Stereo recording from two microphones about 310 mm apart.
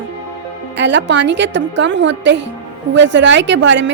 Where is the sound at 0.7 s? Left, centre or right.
Right.